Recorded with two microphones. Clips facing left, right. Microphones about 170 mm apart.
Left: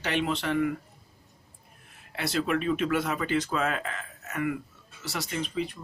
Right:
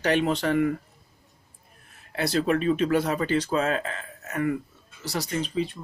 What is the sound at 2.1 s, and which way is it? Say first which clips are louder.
Speech: right 4 dB; 35° right (ahead or behind).